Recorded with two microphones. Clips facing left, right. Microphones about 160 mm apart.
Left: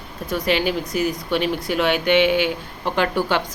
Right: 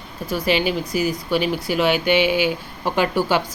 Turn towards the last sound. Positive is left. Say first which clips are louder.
# right 1 dB
turn(degrees=-5)  # may be behind; listen again after turning